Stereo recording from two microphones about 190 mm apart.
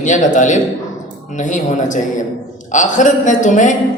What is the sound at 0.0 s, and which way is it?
A man's voice, 40° left (ahead or behind).